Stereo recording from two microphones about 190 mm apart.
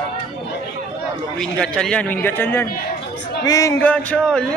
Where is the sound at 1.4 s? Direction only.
5° left (ahead or behind).